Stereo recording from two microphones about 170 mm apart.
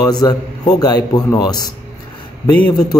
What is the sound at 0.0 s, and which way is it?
A man's voice, 25° left (ahead or behind).